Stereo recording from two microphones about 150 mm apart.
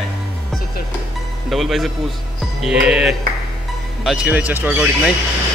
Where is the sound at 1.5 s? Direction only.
Centre (ahead or behind).